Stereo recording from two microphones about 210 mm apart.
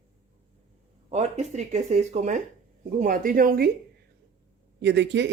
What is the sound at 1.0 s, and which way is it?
Speech, 30° right (ahead or behind).